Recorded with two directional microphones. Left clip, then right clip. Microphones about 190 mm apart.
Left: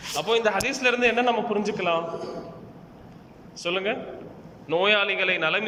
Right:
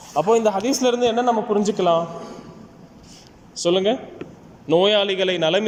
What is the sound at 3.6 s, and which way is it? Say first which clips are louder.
A man's voice: right 7 dB; 30° right (ahead or behind).